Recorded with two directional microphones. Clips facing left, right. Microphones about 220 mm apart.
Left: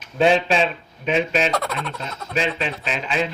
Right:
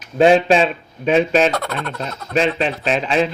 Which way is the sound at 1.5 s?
Centre (ahead or behind).